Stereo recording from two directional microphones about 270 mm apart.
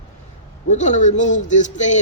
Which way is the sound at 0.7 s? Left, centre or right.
Left.